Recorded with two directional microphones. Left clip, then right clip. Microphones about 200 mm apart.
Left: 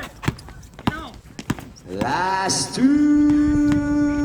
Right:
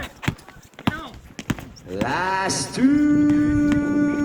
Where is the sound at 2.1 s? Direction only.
40° left (ahead or behind).